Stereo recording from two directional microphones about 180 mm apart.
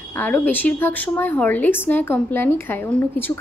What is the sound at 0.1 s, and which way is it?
Speech, 10° left (ahead or behind).